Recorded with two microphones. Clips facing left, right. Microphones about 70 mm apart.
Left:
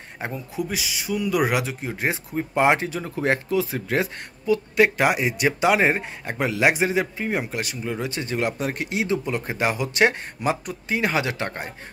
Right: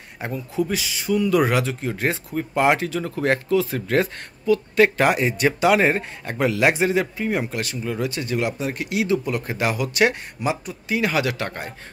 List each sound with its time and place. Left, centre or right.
0.2 s speech: left
0.6 s speech: centre
5.6 s a man's voice: left
10.4 s speech: left
11.0 s a man's voice: left